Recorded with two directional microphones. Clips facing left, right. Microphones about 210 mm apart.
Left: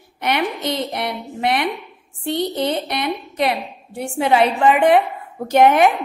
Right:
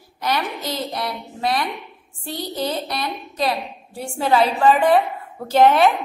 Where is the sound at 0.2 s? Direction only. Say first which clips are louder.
Left 3 dB; 20° left (ahead or behind).